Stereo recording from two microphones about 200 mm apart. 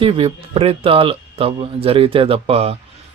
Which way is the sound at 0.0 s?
25° right (ahead or behind).